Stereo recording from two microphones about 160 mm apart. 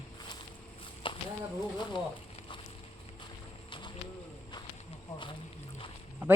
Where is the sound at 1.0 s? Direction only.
30° left (ahead or behind).